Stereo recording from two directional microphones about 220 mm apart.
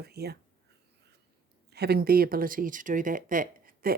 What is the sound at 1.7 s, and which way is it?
Speech, 45° right (ahead or behind).